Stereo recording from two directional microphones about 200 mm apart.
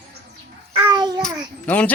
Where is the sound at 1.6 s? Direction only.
5° left (ahead or behind).